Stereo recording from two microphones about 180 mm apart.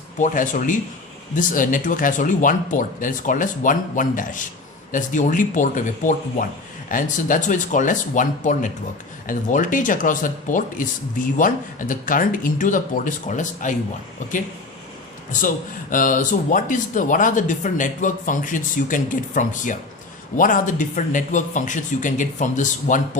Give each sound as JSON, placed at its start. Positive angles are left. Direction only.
{"t": 0.2, "sound": "speech", "side_deg": 45}
{"t": 15.3, "sound": "speech", "side_deg": 45}